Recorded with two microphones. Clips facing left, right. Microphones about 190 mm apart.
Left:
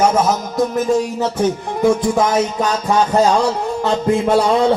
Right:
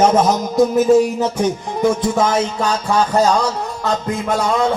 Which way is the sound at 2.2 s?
15° left (ahead or behind).